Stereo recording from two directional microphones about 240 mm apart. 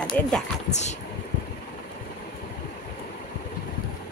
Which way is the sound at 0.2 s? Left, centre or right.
Centre.